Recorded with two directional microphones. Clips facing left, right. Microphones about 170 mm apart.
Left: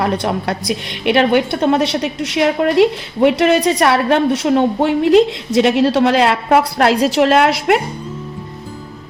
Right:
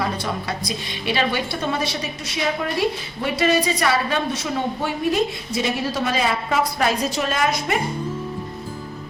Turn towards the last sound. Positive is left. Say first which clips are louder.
# left 9 dB
turn(degrees=75)  # may be behind; listen again after turning